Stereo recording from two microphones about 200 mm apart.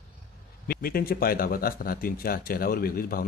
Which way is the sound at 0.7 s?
50° left (ahead or behind).